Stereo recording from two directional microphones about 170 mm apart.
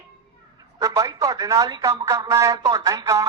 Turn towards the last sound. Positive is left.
turn(degrees=-20)  # may be behind; listen again after turning